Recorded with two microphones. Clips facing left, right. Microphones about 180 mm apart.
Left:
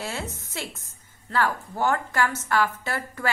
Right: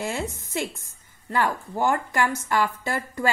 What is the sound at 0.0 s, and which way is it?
A woman's voice, 15° right (ahead or behind).